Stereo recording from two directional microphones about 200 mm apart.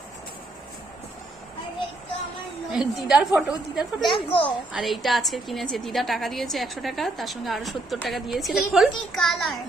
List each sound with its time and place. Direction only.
2.7 s a woman's voice: 5° right (ahead or behind)
4.1 s a child's voice: 25° left (ahead or behind)
4.7 s a woman's voice: centre (ahead or behind)